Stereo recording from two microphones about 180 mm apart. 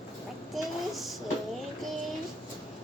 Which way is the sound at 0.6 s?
Centre (ahead or behind).